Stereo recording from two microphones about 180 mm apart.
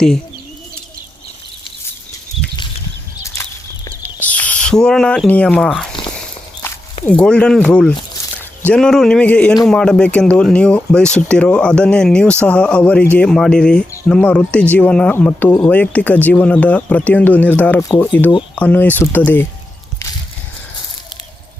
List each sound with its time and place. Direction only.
4.2 s speech: 10° left (ahead or behind)
7.0 s a man's voice: 5° left (ahead or behind)